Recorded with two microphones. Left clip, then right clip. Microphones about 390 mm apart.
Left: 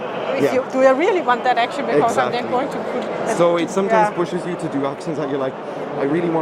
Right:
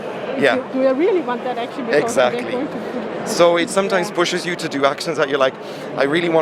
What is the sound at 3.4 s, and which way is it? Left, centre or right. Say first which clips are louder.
Speech: right 4 dB; right.